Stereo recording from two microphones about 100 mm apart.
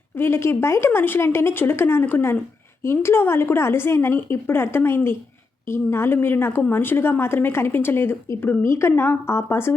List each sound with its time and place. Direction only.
0.2 s a woman's voice: 25° left (ahead or behind)